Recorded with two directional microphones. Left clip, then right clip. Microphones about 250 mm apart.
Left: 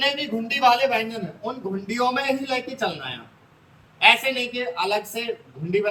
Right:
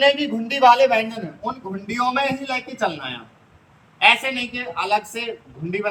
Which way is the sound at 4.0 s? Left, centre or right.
Centre.